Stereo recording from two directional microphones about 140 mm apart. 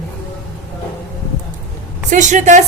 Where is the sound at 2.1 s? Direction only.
65° right (ahead or behind).